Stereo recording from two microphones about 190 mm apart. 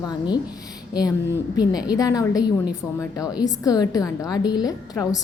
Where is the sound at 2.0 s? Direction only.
20° left (ahead or behind).